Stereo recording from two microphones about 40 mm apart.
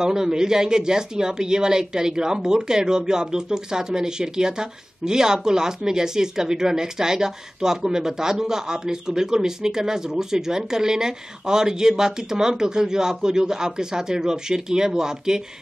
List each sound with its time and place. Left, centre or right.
0.0 s speech: centre